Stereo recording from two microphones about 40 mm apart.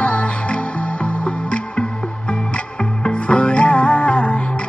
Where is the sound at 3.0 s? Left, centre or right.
Left.